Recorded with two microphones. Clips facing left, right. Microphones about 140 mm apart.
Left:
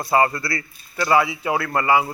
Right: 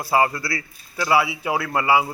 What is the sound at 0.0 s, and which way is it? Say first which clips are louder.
A man's voice: left 1 dB; 10° right (ahead or behind).